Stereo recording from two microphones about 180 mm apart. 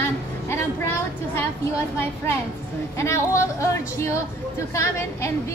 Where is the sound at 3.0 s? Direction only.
15° left (ahead or behind).